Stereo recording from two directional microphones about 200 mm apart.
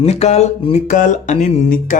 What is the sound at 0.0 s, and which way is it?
A man's voice, 30° left (ahead or behind).